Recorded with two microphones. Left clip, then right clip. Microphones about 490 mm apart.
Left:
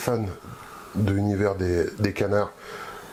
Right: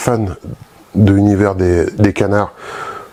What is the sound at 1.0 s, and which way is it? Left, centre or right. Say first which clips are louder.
Speech: right 12 dB; right.